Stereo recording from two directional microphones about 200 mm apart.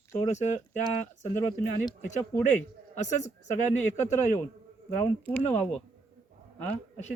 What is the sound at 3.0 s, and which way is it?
Speech, 35° left (ahead or behind).